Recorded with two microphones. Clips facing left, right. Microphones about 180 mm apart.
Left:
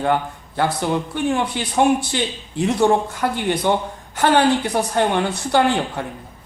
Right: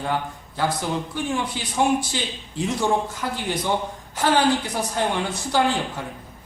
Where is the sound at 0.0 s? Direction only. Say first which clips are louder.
Left 6 dB; 60° left (ahead or behind).